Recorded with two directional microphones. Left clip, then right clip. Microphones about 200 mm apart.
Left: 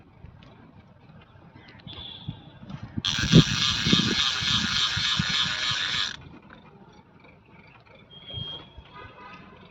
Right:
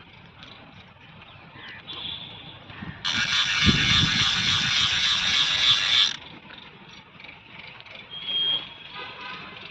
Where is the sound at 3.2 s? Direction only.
15° left (ahead or behind).